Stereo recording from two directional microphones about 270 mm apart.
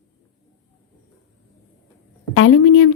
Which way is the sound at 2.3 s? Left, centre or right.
Left.